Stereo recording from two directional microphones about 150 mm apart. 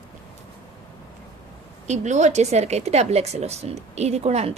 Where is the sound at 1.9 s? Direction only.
50° right (ahead or behind).